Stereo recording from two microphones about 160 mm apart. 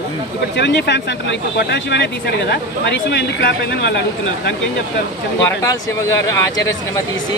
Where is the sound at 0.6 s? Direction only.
90° left.